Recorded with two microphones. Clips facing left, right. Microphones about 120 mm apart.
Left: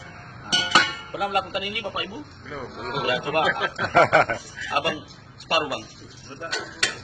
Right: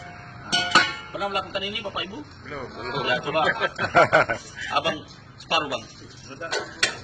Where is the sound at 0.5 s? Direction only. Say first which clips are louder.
Even; centre (ahead or behind).